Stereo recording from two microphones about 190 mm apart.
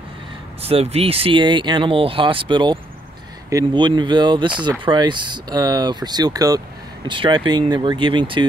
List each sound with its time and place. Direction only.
0.6 s speech: 30° right (ahead or behind)